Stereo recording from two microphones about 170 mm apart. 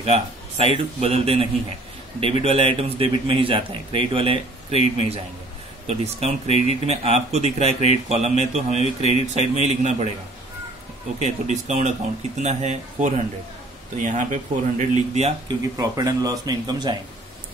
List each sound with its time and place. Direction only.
0.0 s speech: 35° right (ahead or behind)
5.9 s speech: 35° right (ahead or behind)
11.1 s speech: 40° right (ahead or behind)
15.4 s speech: 20° right (ahead or behind)